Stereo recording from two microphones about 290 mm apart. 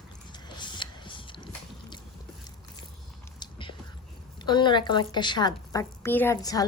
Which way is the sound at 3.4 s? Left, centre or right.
Centre.